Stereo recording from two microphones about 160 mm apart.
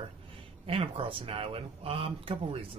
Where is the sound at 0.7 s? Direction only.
35° right (ahead or behind).